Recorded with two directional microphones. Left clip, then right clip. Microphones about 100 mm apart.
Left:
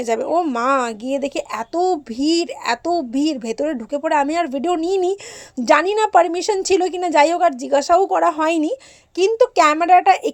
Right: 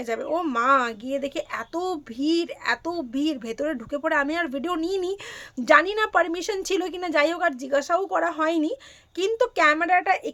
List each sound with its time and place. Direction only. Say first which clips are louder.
0.0 s speech: left 8 dB; 75° left (ahead or behind)
0.5 s a woman's voice: left 2 dB; 60° left (ahead or behind)
1.8 s speech: left 10 dB; 45° left (ahead or behind)
2.1 s a woman's voice: left 6 dB; 65° left (ahead or behind); by 8.7 s 80° left
9.1 s speech: left 8 dB; 50° left (ahead or behind)
9.8 s a child's voice: left 9 dB; 90° left